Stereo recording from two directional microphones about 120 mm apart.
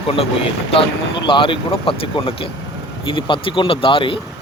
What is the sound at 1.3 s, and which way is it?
Speech, 45° left (ahead or behind).